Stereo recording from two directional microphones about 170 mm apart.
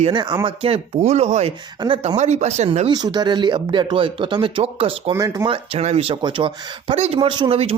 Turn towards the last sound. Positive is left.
turn(degrees=-35)  # may be behind; listen again after turning